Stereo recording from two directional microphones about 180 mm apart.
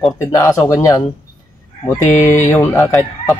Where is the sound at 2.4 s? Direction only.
10° left (ahead or behind).